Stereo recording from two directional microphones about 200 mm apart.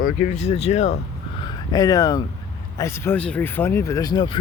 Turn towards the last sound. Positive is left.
turn(degrees=20)  # may be behind; listen again after turning